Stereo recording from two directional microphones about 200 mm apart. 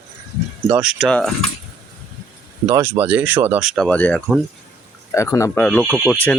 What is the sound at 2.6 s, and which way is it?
Speech, 15° right (ahead or behind).